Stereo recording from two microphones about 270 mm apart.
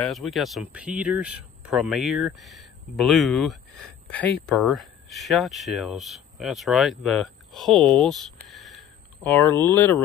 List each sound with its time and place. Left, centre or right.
0.0 s speech: centre